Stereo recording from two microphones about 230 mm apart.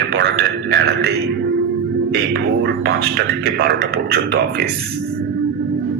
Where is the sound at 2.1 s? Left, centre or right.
Right.